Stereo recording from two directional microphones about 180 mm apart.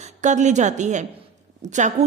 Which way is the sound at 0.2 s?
40° right (ahead or behind).